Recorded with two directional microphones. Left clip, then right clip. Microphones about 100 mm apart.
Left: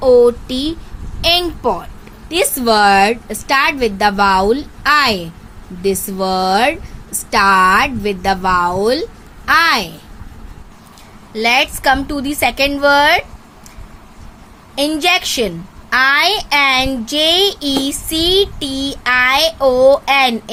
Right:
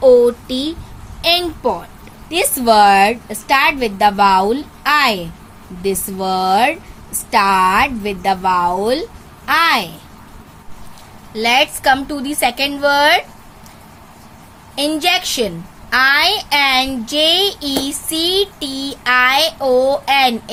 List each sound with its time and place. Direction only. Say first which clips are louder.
0.0 s speech: even; 35° left (ahead or behind)
2.3 s a woman's voice: right 1 dB; 30° left (ahead or behind)
11.3 s a woman's voice: even; 40° left (ahead or behind)
14.8 s a child's voice: left 2 dB; 40° left (ahead or behind)